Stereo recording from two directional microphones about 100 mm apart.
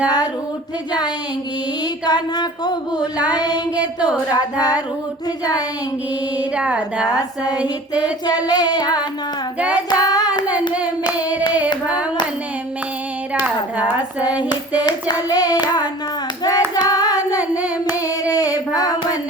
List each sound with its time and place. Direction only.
2.0 s a sound: 45° left (ahead or behind)
6.3 s speech: 15° right (ahead or behind)
7.1 s hands: 40° left (ahead or behind)
7.6 s speech: 15° right (ahead or behind)
8.4 s a sound: 40° left (ahead or behind)
9.7 s child singing: 40° left (ahead or behind)
11.2 s hands: 15° right (ahead or behind)
13.4 s a woman's voice: 15° right (ahead or behind)
14.5 s hands: 40° left (ahead or behind)
15.6 s a sound: 45° left (ahead or behind)
16.4 s hands: 40° left (ahead or behind)
17.3 s singing: 15° right (ahead or behind)
18.3 s female singing: 40° left (ahead or behind)